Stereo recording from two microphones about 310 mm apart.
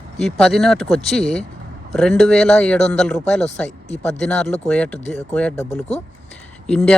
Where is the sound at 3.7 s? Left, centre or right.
Left.